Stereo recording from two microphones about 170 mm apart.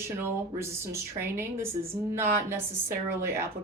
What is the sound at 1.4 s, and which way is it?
Speech, 15° right (ahead or behind).